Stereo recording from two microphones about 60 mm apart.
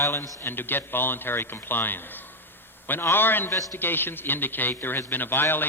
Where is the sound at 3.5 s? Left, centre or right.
Left.